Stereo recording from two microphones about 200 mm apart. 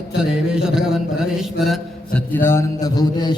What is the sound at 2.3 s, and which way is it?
A man's voice, 10° left (ahead or behind).